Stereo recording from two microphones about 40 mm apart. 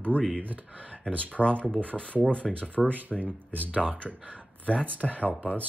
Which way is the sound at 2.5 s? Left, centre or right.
Right.